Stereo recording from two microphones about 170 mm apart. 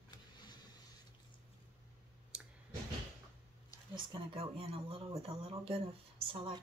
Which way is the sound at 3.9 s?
30° right (ahead or behind).